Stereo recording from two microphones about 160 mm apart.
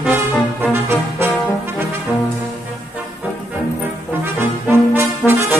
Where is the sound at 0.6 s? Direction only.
10° right (ahead or behind).